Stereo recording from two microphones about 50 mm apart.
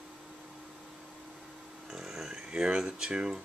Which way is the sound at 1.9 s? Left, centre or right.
Centre.